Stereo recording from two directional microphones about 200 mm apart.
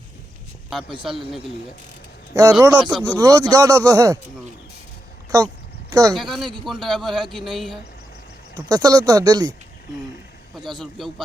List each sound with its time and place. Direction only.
2.3 s speech: 15° right (ahead or behind)
5.9 s speech: 15° right (ahead or behind)
6.1 s a man's voice: centre (ahead or behind)
8.5 s speech: 20° right (ahead or behind)
10.8 s a man's voice: centre (ahead or behind)